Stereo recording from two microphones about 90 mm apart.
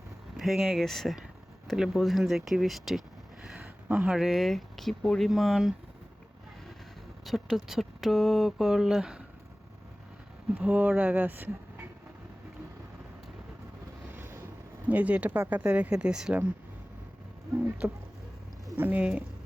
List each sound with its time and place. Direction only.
0.3 s speech: centre (ahead or behind)
7.3 s speech: centre (ahead or behind)
10.6 s speech: 15° right (ahead or behind)
14.1 s boat: 25° right (ahead or behind)
14.8 s speech: 15° right (ahead or behind)
17.8 s music: 30° right (ahead or behind)
18.8 s speech: 20° right (ahead or behind)